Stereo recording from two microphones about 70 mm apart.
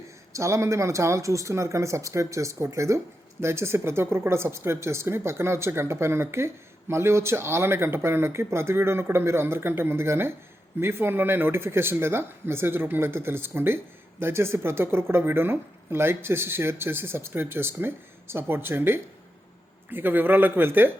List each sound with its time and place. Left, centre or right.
0.3 s speech: right